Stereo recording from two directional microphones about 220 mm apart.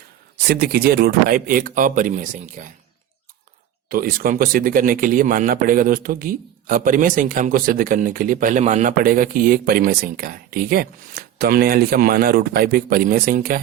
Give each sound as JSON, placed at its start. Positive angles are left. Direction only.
{"t": 0.4, "sound": "speech", "side_deg": -45}
{"t": 3.8, "sound": "speech", "side_deg": -40}